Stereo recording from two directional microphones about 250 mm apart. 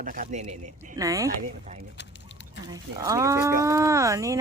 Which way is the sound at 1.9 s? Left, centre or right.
Left.